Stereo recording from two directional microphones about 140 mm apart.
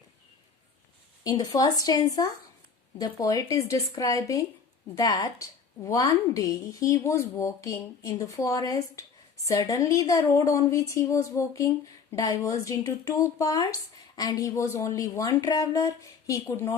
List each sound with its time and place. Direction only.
1.2 s a woman's voice: 25° left (ahead or behind)